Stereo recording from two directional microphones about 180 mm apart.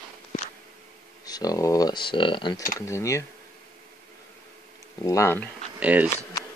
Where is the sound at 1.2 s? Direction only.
20° left (ahead or behind).